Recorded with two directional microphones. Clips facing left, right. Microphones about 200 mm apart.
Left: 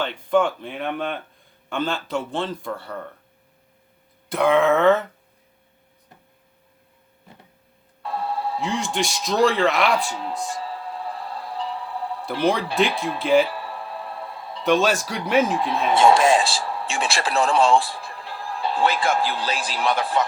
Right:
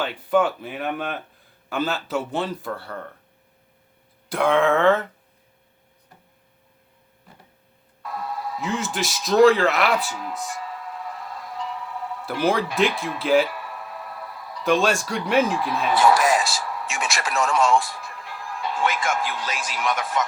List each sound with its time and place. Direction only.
0.0 s a man's voice: 5° right (ahead or behind)
4.3 s a man's voice: centre (ahead or behind)
8.0 s a sound: 30° left (ahead or behind)
8.6 s a man's voice: centre (ahead or behind)
10.1 s music: 30° left (ahead or behind)
13.2 s a man's voice: centre (ahead or behind)
13.5 s music: 30° left (ahead or behind)
14.6 s a man's voice: centre (ahead or behind)
15.5 s speech: 25° left (ahead or behind)